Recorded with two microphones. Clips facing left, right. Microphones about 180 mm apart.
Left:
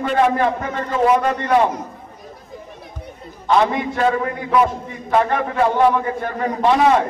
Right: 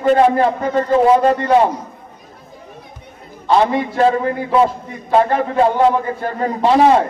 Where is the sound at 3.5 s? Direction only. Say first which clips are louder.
Right 3 dB; 30° right (ahead or behind).